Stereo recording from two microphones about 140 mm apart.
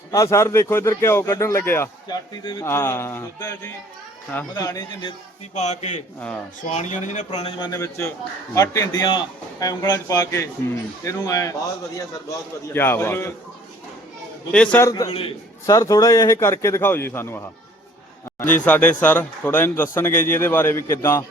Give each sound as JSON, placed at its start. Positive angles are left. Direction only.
{"t": 0.1, "sound": "speech", "side_deg": 20}
{"t": 2.0, "sound": "a man's voice", "side_deg": 35}
{"t": 2.6, "sound": "speech", "side_deg": 15}
{"t": 4.5, "sound": "speech", "side_deg": 25}
{"t": 5.5, "sound": "speech", "side_deg": 55}
{"t": 7.6, "sound": "speech", "side_deg": 20}
{"t": 12.7, "sound": "speech", "side_deg": 15}
{"t": 14.5, "sound": "speech", "side_deg": 10}
{"t": 14.8, "sound": "speech", "side_deg": 25}